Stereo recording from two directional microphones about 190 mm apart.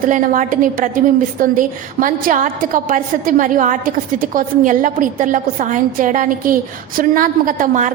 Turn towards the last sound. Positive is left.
turn(degrees=-45)  # may be behind; listen again after turning